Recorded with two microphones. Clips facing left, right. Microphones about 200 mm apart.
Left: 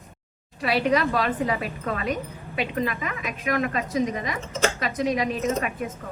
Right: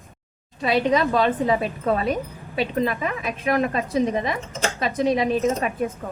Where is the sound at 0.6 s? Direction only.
20° right (ahead or behind).